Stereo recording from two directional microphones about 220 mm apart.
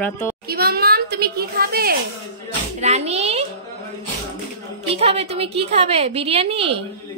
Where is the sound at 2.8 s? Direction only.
30° right (ahead or behind).